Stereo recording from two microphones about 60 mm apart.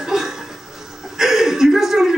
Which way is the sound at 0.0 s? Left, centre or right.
Centre.